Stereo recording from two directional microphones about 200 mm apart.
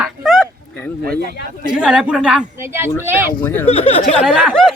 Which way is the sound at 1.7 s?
5° right (ahead or behind).